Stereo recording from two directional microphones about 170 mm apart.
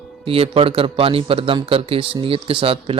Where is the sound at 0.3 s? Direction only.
35° right (ahead or behind).